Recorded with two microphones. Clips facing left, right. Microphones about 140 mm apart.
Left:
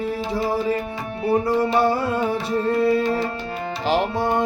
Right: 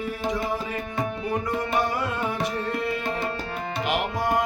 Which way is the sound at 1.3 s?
30° left (ahead or behind).